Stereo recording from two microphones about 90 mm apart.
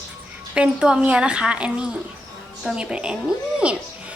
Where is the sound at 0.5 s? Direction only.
10° right (ahead or behind).